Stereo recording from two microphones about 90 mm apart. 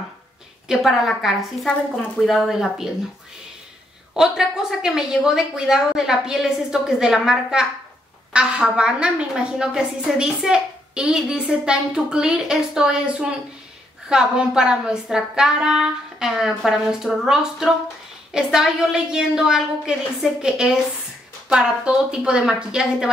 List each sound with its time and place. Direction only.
0.7 s speech: 5° right (ahead or behind)
4.1 s a woman's voice: 5° right (ahead or behind)